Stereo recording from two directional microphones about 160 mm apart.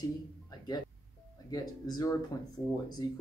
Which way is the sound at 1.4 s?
25° left (ahead or behind).